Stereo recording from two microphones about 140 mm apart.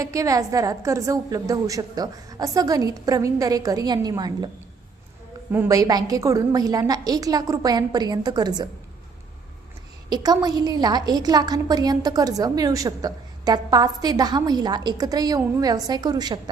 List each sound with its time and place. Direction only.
0.0 s a woman's voice: 25° right (ahead or behind)
5.5 s a woman's voice: 20° right (ahead or behind)
10.1 s a woman's voice: 30° right (ahead or behind)